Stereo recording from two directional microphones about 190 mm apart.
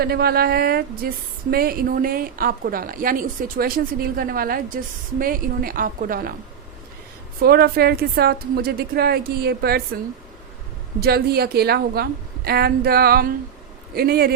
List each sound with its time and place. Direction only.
0.0 s speech: 55° right (ahead or behind)
7.4 s speech: 55° right (ahead or behind)
11.0 s speech: 55° right (ahead or behind)